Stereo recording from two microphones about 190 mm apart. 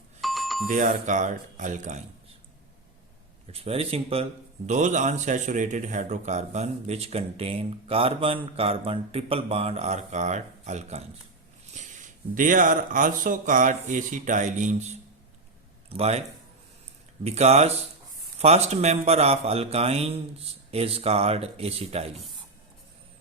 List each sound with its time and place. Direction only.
0.2 s doorbell: centre (ahead or behind)
0.7 s speech: 40° right (ahead or behind)
3.4 s speech: 30° right (ahead or behind)
12.3 s speech: 45° right (ahead or behind)
17.2 s speech: 35° right (ahead or behind)